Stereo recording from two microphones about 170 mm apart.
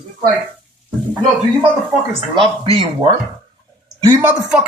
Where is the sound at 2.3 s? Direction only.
30° right (ahead or behind).